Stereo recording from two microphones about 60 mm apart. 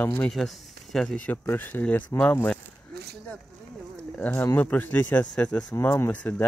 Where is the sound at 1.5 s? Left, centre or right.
Left.